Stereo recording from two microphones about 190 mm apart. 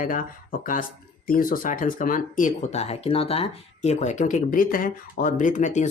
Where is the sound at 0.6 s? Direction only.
45° left (ahead or behind).